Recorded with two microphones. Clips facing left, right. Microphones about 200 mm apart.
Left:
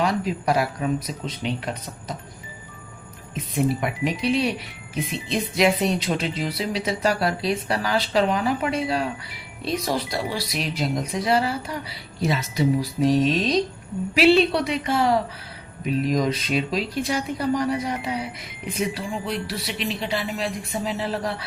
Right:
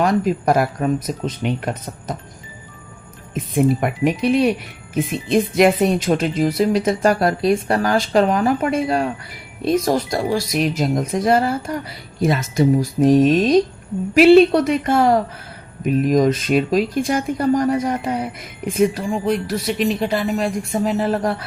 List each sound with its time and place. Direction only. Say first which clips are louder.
0.0 s speech: right 6 dB; 50° right (ahead or behind)
3.3 s speech: right 6 dB; 50° right (ahead or behind)